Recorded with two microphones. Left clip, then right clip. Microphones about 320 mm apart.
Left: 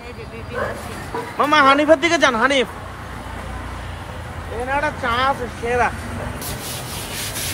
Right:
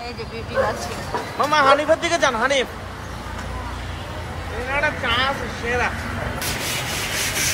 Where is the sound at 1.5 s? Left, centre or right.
Left.